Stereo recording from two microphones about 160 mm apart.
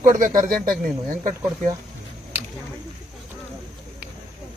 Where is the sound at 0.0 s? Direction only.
55° right (ahead or behind).